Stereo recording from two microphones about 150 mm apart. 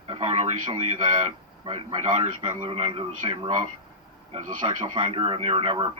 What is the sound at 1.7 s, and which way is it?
A man's voice, 45° right (ahead or behind).